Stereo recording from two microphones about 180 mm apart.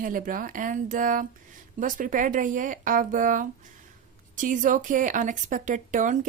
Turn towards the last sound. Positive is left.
turn(degrees=-45)  # may be behind; listen again after turning